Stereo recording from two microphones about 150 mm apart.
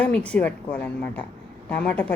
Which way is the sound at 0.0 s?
10° left (ahead or behind).